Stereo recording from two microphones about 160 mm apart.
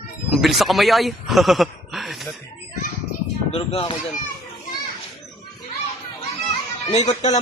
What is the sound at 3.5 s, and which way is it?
Speech, 35° left (ahead or behind).